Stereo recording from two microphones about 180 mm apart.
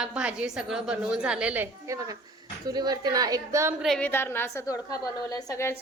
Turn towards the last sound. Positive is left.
turn(degrees=20)  # may be behind; listen again after turning